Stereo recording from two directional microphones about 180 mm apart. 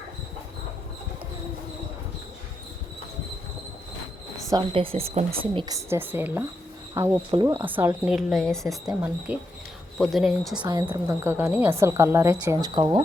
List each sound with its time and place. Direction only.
4.4 s a woman's voice: 25° right (ahead or behind)
7.5 s a woman's voice: 10° right (ahead or behind)
8.0 s a woman's voice: centre (ahead or behind)
9.0 s a woman's voice: 5° right (ahead or behind)
10.6 s a woman's voice: 25° right (ahead or behind)